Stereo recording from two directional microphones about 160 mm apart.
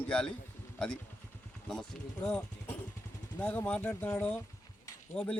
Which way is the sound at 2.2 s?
10° left (ahead or behind).